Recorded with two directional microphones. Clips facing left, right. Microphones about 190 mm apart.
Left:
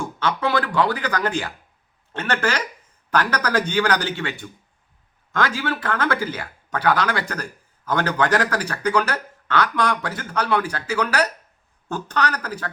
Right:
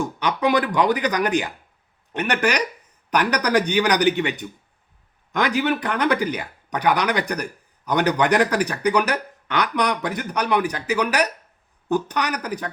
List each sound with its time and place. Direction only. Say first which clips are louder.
0.0 s speech: right 2 dB; 15° right (ahead or behind)